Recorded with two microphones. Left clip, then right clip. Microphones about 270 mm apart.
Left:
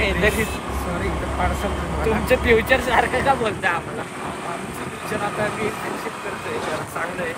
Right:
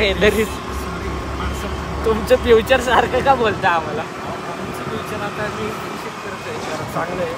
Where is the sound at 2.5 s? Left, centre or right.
Centre.